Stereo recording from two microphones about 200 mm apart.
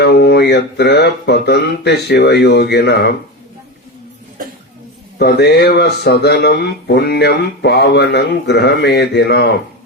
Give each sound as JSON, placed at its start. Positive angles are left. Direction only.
{"t": 0.0, "sound": "speech", "side_deg": 55}
{"t": 5.2, "sound": "speech", "side_deg": 55}